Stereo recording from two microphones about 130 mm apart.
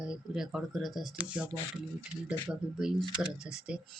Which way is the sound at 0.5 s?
Centre (ahead or behind).